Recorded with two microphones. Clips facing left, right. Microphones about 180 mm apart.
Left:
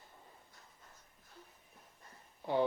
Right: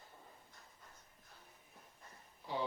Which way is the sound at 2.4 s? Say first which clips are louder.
Left 8 dB; 55° left (ahead or behind).